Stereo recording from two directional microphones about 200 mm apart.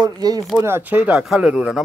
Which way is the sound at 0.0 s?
20° right (ahead or behind).